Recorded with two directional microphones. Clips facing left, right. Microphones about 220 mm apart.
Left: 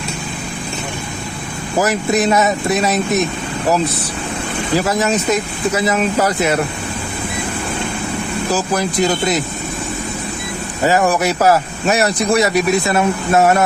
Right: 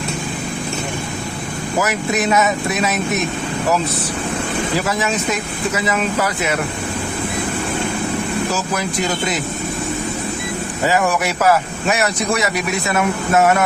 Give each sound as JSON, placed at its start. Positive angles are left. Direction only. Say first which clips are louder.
{"t": 1.8, "sound": "speech", "louder": "left 4 dB", "side_deg": 35}
{"t": 4.9, "sound": "speech", "louder": "left 4 dB", "side_deg": 40}
{"t": 10.8, "sound": "speech", "louder": "left 3 dB", "side_deg": 40}